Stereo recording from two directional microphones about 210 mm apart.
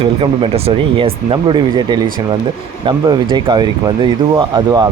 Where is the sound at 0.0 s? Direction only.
25° right (ahead or behind).